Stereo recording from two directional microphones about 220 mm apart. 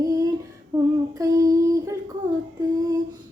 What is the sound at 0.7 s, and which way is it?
Female singing, 10° right (ahead or behind).